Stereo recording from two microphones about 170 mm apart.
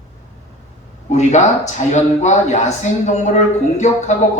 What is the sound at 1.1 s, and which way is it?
Speech, 45° left (ahead or behind).